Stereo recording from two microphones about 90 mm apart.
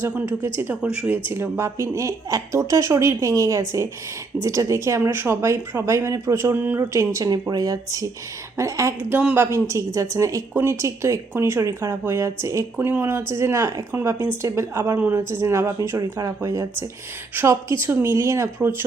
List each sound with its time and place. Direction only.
0.0 s speech: 20° right (ahead or behind)
1.3 s a woman's voice: 30° right (ahead or behind)
6.9 s a woman's voice: 35° right (ahead or behind)
9.0 s speech: 15° right (ahead or behind)
9.3 s a woman's voice: 30° right (ahead or behind)
12.9 s a woman's voice: 25° right (ahead or behind)
14.9 s speech: 20° right (ahead or behind)
15.3 s a woman's voice: 30° right (ahead or behind)